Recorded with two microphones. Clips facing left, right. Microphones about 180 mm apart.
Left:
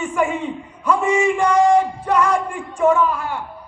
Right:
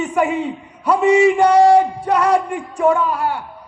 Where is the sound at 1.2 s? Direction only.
35° right (ahead or behind).